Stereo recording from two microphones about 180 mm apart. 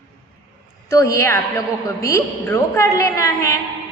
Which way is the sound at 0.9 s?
15° left (ahead or behind).